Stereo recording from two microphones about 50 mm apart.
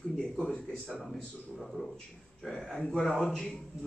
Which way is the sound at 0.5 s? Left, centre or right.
Centre.